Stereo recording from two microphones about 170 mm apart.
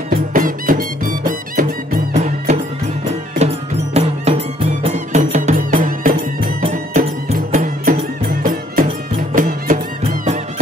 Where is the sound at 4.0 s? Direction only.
35° right (ahead or behind); by 6.6 s 60° right (ahead or behind).